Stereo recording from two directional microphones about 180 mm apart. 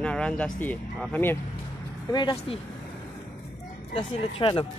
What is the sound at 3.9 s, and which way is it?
Speech, 30° left (ahead or behind).